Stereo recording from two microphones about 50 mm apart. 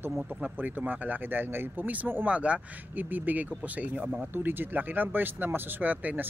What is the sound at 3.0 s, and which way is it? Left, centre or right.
Speech, right.